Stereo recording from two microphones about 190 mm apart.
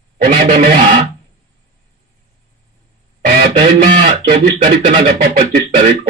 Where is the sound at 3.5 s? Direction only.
40° right (ahead or behind).